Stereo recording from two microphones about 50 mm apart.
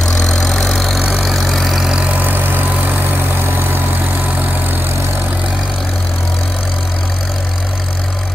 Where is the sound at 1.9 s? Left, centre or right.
Right.